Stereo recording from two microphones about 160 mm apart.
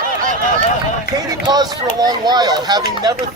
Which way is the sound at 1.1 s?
25° right (ahead or behind).